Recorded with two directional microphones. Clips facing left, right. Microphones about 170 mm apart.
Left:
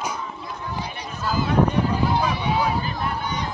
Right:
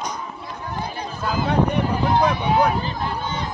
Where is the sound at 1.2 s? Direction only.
55° right (ahead or behind).